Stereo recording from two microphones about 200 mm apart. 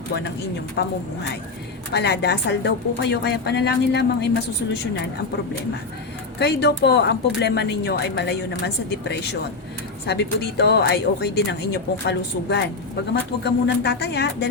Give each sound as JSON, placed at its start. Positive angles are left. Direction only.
{"t": 0.8, "sound": "speech", "side_deg": 55}
{"t": 6.4, "sound": "speech", "side_deg": 55}